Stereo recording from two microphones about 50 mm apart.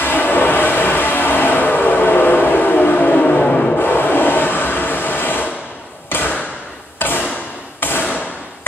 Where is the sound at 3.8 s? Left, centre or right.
Left.